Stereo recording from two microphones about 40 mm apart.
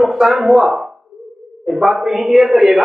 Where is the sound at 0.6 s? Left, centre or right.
Centre.